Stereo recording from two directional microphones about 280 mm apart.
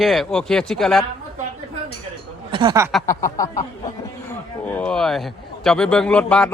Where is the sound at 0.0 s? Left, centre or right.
Centre.